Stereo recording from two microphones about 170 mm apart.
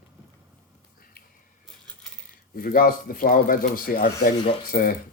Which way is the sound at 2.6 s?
60° left (ahead or behind).